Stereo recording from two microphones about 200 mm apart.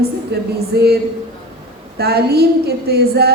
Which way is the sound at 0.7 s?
55° right (ahead or behind).